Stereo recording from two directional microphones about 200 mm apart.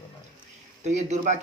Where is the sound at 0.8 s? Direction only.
35° right (ahead or behind).